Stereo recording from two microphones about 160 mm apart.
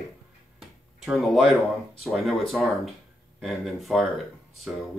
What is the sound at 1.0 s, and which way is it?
Speech, centre (ahead or behind).